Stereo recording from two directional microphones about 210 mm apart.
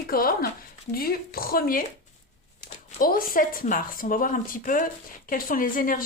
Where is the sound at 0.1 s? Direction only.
45° left (ahead or behind).